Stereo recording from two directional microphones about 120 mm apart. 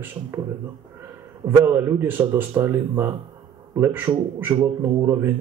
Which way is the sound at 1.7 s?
20° right (ahead or behind).